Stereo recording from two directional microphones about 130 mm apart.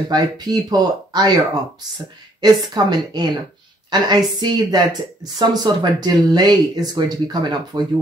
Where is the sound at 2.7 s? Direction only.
35° right (ahead or behind).